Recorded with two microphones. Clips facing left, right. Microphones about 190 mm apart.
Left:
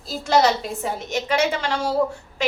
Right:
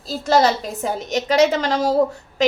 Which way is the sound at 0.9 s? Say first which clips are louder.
Right 7 dB; 40° right (ahead or behind).